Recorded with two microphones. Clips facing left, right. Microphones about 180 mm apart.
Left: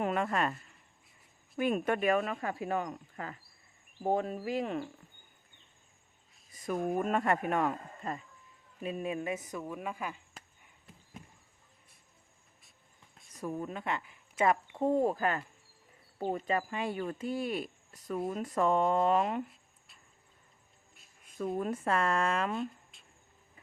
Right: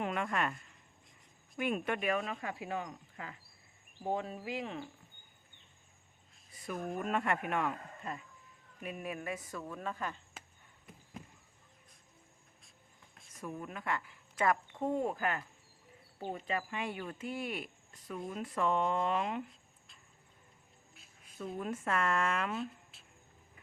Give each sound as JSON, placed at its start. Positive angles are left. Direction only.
{"t": 0.0, "sound": "speech", "side_deg": 35}
{"t": 6.5, "sound": "speech", "side_deg": 45}
{"t": 8.8, "sound": "speech", "side_deg": 25}
{"t": 13.3, "sound": "speech", "side_deg": 35}
{"t": 14.9, "sound": "speech", "side_deg": 35}
{"t": 20.9, "sound": "music", "side_deg": 0}
{"t": 21.3, "sound": "speech", "side_deg": 45}
{"t": 22.6, "sound": "a sound", "side_deg": -5}